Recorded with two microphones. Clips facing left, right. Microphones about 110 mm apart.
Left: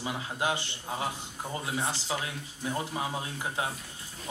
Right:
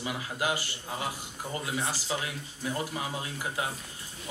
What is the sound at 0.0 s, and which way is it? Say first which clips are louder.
Speech: even; 30° left (ahead or behind).